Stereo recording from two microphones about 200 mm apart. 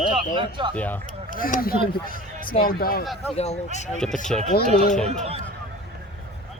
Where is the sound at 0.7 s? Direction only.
10° left (ahead or behind).